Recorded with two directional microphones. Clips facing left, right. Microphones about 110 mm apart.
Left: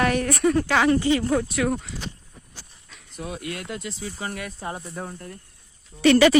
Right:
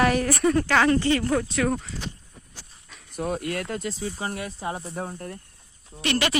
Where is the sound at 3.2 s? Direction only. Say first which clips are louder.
Right 5 dB; 50° right (ahead or behind).